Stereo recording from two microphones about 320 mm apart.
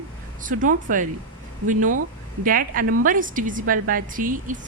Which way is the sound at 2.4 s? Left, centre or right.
Right.